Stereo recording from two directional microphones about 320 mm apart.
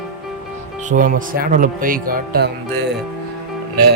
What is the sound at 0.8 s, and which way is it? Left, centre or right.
Music, right.